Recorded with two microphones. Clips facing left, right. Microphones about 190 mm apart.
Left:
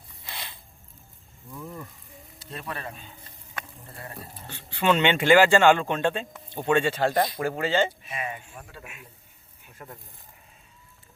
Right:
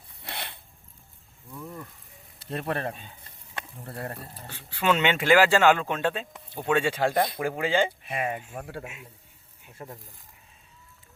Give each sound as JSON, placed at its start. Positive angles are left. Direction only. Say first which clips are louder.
{"t": 0.2, "sound": "a sound", "louder": "right 3 dB", "side_deg": -65}
{"t": 1.6, "sound": "a sound", "louder": "left 1 dB", "side_deg": 10}
{"t": 2.4, "sound": "speech", "louder": "right 6 dB", "side_deg": -55}
{"t": 4.2, "sound": "speech", "louder": "left 1 dB", "side_deg": -5}
{"t": 8.0, "sound": "speech", "louder": "right 4 dB", "side_deg": -55}
{"t": 8.8, "sound": "a man's voice", "louder": "right 4 dB", "side_deg": -25}